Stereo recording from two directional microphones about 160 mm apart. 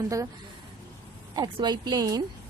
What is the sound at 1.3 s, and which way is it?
Speech, 25° right (ahead or behind).